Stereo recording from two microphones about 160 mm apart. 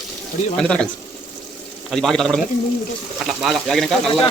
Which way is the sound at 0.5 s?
5° left (ahead or behind).